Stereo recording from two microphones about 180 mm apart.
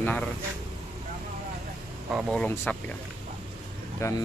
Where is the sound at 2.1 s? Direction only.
5° left (ahead or behind).